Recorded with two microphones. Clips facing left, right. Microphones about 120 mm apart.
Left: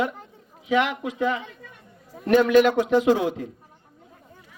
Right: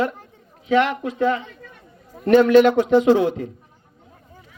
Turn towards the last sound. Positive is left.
turn(degrees=5)  # may be behind; listen again after turning